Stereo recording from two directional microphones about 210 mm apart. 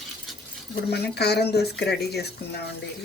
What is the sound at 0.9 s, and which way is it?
Speech, 50° left (ahead or behind).